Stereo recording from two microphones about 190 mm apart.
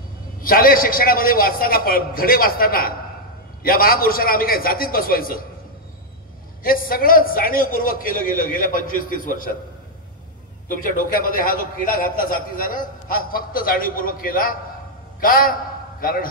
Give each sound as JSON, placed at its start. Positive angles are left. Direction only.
{"t": 0.4, "sound": "a man's voice", "side_deg": 50}
{"t": 6.6, "sound": "a man's voice", "side_deg": 50}
{"t": 10.8, "sound": "a man's voice", "side_deg": 45}